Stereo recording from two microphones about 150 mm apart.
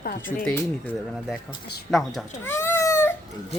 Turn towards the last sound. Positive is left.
turn(degrees=15)  # may be behind; listen again after turning